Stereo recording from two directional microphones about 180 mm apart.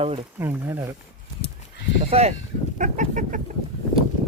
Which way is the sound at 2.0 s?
35° right (ahead or behind).